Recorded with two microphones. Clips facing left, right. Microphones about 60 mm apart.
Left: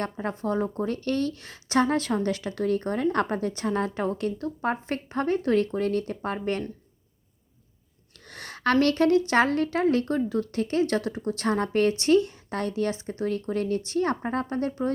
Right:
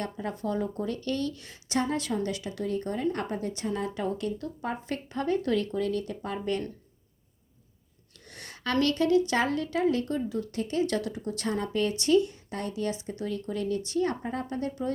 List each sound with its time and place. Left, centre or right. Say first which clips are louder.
0.0 s a woman's voice: left 3 dB; left
8.3 s a woman's voice: left 7 dB; left